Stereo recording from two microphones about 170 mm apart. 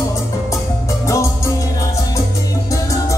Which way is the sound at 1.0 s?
15° left (ahead or behind).